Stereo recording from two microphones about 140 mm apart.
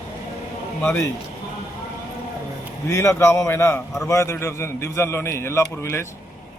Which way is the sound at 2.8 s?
20° left (ahead or behind).